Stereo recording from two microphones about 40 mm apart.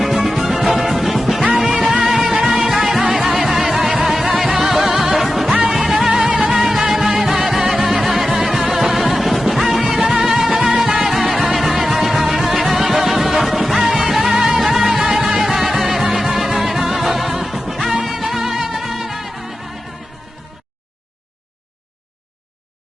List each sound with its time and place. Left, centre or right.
0.0 s music: centre